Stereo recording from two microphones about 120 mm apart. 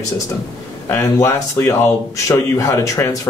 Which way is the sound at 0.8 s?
20° left (ahead or behind).